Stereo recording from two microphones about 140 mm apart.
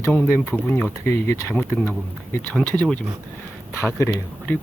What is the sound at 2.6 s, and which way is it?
Speech, 5° left (ahead or behind).